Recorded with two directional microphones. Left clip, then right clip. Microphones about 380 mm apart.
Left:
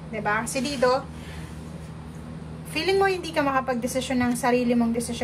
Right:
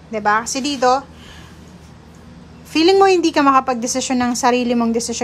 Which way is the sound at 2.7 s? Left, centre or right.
Centre.